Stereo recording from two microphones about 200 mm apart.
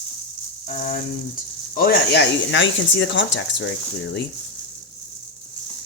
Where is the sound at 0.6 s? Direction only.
45° left (ahead or behind).